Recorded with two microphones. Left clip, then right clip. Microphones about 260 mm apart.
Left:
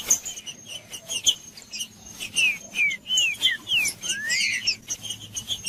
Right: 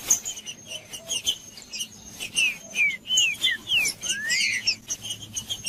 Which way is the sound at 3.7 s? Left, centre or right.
Centre.